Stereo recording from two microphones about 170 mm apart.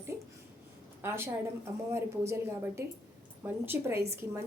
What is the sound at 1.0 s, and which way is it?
Speech, 15° right (ahead or behind).